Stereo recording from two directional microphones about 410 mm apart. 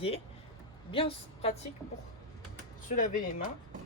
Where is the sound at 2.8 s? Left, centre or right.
Centre.